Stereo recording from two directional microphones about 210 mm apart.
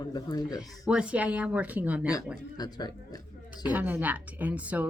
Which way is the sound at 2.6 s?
20° left (ahead or behind).